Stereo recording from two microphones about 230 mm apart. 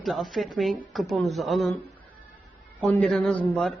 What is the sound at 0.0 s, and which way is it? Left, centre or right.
A man's voice, centre.